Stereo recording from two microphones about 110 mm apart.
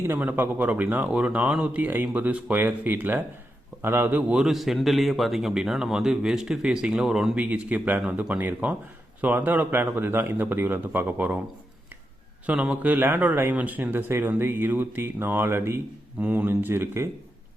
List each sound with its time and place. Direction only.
0.1 s a man's voice: 15° right (ahead or behind)
12.5 s speech: 10° right (ahead or behind)